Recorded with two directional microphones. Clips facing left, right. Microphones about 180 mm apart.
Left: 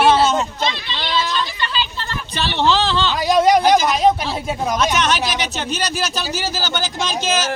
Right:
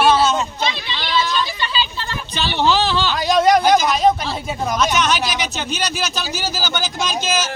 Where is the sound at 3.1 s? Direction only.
5° left (ahead or behind).